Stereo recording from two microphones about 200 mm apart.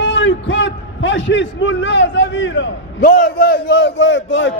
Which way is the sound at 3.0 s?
45° left (ahead or behind).